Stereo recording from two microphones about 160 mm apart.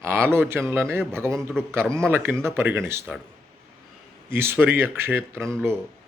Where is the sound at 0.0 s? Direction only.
15° right (ahead or behind).